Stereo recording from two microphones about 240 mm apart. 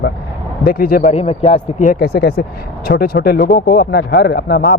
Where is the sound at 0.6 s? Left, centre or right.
Left.